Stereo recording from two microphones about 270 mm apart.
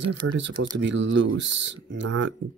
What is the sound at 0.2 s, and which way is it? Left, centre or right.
Speech, right.